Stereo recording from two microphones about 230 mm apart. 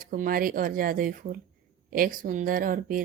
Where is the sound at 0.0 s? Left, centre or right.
Right.